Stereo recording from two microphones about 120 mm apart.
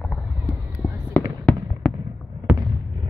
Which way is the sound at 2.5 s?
10° right (ahead or behind).